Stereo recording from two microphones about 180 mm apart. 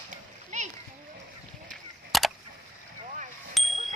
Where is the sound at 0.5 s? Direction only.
40° right (ahead or behind).